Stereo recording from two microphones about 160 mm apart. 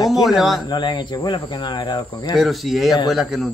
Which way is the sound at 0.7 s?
30° left (ahead or behind).